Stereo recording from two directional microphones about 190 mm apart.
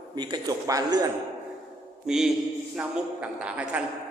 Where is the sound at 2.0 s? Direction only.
Centre (ahead or behind).